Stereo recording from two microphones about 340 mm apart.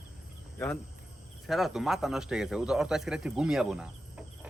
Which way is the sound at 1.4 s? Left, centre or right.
Centre.